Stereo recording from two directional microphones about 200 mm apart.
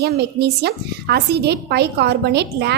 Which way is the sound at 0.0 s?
55° right (ahead or behind).